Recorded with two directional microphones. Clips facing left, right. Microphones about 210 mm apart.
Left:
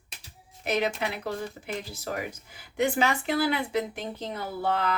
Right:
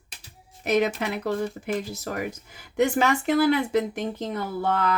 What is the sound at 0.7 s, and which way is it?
Speech, 45° right (ahead or behind).